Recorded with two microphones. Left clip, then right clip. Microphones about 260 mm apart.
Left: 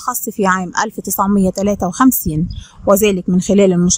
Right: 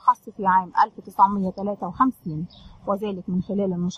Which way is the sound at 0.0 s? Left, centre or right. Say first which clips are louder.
Left 3 dB; left.